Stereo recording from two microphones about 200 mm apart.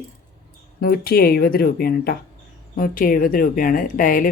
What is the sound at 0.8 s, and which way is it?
Speech, 50° left (ahead or behind).